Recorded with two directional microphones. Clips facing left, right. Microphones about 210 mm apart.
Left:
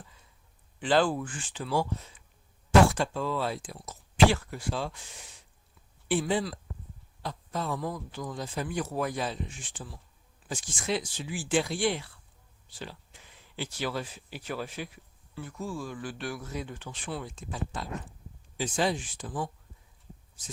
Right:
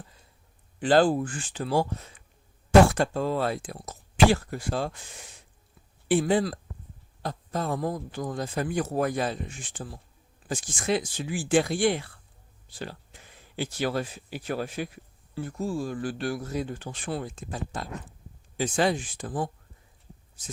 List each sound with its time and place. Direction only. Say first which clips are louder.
0.8 s speech: right 5 dB; 40° right (ahead or behind)
6.1 s speech: right 5 dB; 50° right (ahead or behind)